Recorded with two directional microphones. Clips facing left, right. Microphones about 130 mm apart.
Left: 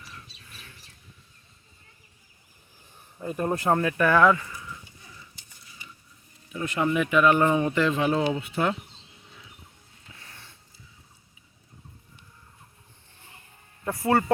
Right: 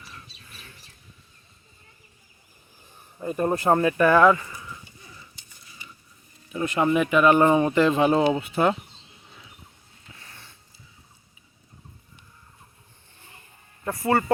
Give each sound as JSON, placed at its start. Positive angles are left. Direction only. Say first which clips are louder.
{"t": 3.2, "sound": "speech", "louder": "right 3 dB", "side_deg": -10}
{"t": 6.7, "sound": "speech", "louder": "right 2 dB", "side_deg": -30}
{"t": 13.8, "sound": "speech", "louder": "even", "side_deg": 5}